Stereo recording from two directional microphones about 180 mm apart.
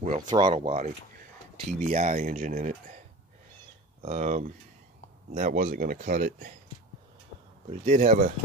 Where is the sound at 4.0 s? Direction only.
40° right (ahead or behind).